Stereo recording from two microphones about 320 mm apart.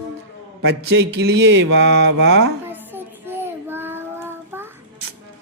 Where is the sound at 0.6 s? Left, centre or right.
Right.